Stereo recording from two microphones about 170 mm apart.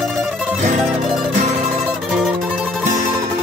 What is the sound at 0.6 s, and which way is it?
Music, 45° right (ahead or behind).